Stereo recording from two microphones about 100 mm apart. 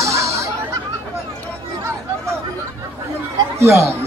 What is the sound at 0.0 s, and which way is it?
Chatter, 30° right (ahead or behind).